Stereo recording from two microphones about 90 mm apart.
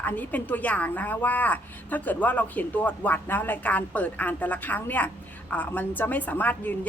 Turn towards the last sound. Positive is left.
turn(degrees=20)  # may be behind; listen again after turning